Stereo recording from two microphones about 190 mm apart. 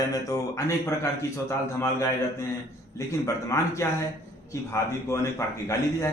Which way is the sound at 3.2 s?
15° left (ahead or behind).